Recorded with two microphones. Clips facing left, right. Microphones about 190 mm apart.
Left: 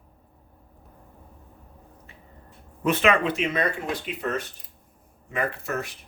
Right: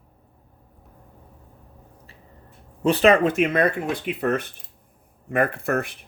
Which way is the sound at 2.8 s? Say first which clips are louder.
Right 5 dB; 35° right (ahead or behind).